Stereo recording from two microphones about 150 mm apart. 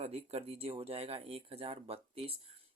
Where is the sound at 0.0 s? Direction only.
45° right (ahead or behind).